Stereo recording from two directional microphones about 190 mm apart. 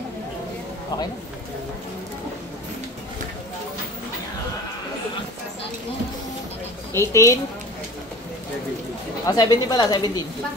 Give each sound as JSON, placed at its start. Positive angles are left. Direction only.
{"t": 7.0, "sound": "a woman's voice", "side_deg": 15}
{"t": 9.2, "sound": "speech", "side_deg": 20}